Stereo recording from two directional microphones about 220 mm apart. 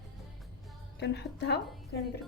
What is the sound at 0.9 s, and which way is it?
Speech, 50° left (ahead or behind).